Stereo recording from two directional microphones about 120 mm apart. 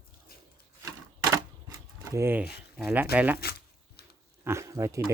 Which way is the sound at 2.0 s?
20° right (ahead or behind).